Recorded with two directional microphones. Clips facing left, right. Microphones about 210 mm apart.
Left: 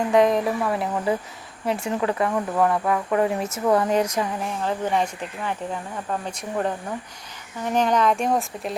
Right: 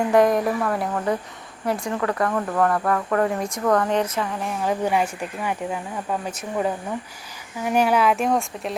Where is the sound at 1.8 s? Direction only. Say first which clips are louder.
Left 3 dB; 20° left (ahead or behind).